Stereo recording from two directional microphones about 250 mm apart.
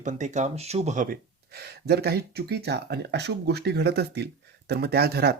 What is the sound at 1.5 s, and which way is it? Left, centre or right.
Speech, right.